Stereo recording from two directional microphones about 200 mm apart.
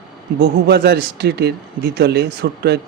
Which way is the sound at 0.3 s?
55° right (ahead or behind).